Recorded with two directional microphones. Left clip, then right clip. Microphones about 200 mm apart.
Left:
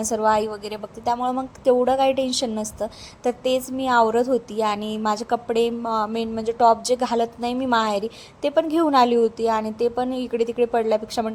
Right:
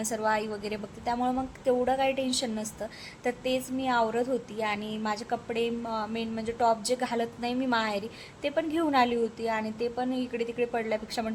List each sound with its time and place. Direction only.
0.0 s a woman's voice: 20° left (ahead or behind)